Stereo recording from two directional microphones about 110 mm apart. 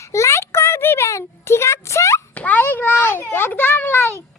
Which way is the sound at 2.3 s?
15° left (ahead or behind).